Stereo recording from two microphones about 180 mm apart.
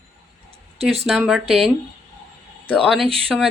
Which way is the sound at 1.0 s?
5° right (ahead or behind).